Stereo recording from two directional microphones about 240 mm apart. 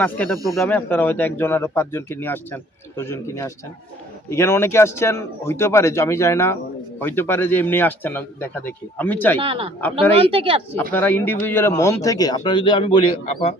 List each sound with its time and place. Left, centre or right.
0.0 s speech: centre
9.4 s a woman's voice: right
10.9 s speech: centre; by 13.6 s left